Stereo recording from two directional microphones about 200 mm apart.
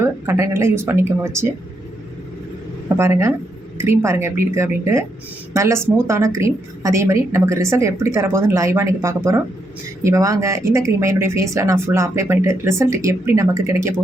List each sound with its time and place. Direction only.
0.0 s speech: 15° right (ahead or behind)
3.0 s speech: 15° right (ahead or behind)